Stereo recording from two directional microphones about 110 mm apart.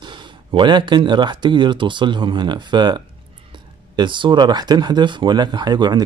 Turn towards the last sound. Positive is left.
turn(degrees=-40)  # may be behind; listen again after turning